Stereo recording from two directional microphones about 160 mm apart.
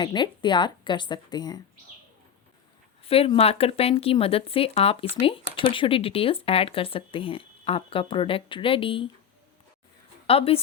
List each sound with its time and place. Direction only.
0.0 s speech: 30° left (ahead or behind)
3.0 s speech: 35° left (ahead or behind)
10.2 s speech: 35° left (ahead or behind)